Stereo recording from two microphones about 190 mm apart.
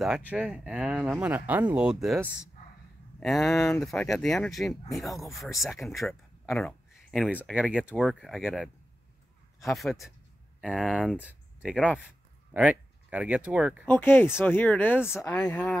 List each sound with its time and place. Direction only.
0.0 s speech: centre (ahead or behind)
3.2 s speech: centre (ahead or behind)
13.8 s speech: 10° left (ahead or behind)